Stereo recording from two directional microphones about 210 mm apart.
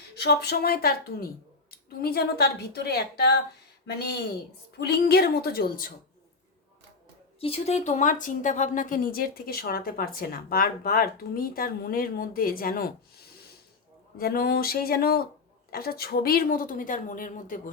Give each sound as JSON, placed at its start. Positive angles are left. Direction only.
{"t": 0.2, "sound": "speech", "side_deg": 50}
{"t": 4.8, "sound": "speech", "side_deg": 50}
{"t": 7.3, "sound": "a woman's voice", "side_deg": 30}